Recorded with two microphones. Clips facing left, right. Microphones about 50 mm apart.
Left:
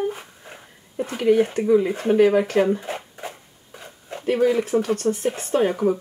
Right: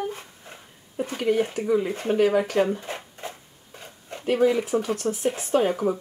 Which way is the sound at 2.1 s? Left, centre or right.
Left.